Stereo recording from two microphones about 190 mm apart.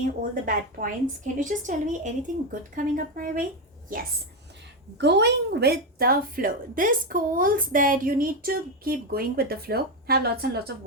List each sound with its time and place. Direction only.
0.2 s a woman's voice: 45° right (ahead or behind)
4.9 s a woman's voice: 65° right (ahead or behind)